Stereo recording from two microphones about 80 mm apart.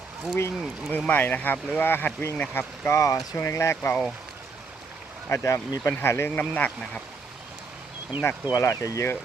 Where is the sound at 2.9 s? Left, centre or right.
Left.